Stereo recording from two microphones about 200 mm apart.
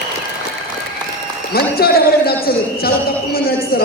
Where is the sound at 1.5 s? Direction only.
50° left (ahead or behind).